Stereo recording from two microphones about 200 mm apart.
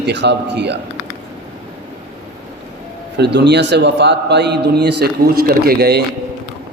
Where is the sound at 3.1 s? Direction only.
60° right (ahead or behind).